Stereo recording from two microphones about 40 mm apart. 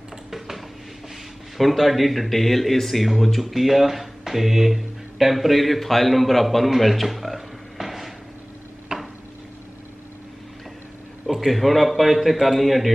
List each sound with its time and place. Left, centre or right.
0.3 s a sound: centre
1.6 s a man's voice: centre
8.9 s tick-tock: right
11.2 s a man's voice: centre